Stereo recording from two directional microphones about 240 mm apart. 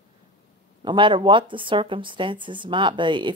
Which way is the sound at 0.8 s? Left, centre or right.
Centre.